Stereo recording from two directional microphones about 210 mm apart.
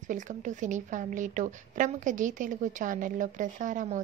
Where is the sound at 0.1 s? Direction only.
35° right (ahead or behind).